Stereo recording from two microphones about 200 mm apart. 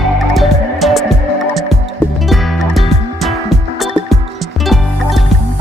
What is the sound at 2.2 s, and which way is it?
Music, centre (ahead or behind).